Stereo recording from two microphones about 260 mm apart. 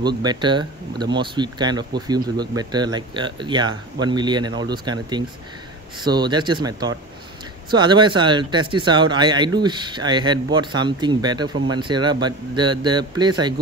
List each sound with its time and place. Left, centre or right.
0.0 s speech: centre